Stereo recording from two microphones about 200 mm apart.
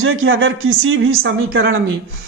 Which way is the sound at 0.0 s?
85° right.